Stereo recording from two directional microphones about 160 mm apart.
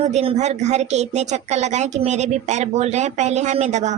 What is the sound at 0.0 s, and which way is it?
Speech, 40° right (ahead or behind).